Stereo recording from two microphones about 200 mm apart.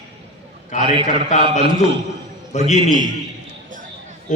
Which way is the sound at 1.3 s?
35° left (ahead or behind).